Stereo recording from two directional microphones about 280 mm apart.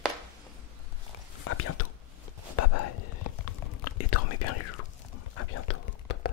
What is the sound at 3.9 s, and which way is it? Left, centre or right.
Whispering, left.